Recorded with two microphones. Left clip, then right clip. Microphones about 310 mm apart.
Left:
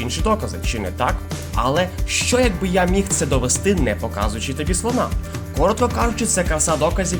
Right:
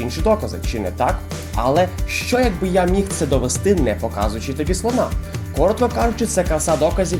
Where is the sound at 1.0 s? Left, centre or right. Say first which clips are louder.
Right 2 dB; left.